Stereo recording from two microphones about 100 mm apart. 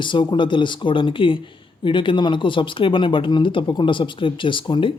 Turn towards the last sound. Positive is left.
turn(degrees=55)  # may be behind; listen again after turning